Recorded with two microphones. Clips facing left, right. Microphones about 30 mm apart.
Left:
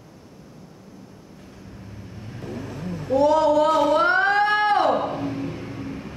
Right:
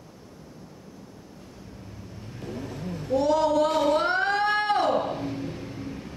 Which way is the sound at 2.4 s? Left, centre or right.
Left.